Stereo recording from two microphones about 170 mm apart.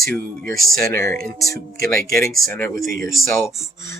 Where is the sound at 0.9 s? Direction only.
15° left (ahead or behind).